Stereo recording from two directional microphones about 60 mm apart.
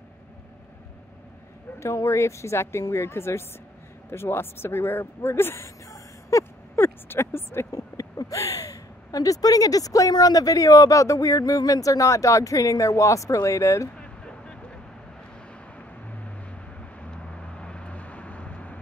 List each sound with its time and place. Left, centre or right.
1.7 s vehicle: left
2.0 s speech: left
7.7 s speech: left
13.9 s a sound: centre
17.0 s vehicle: centre